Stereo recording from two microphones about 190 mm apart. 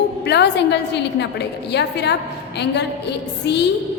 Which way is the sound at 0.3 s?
60° left (ahead or behind).